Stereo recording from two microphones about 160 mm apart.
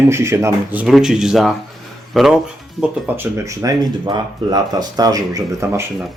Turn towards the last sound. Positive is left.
turn(degrees=-20)  # may be behind; listen again after turning